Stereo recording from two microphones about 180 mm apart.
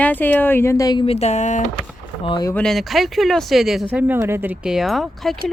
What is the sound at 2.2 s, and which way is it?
Speech, 25° left (ahead or behind).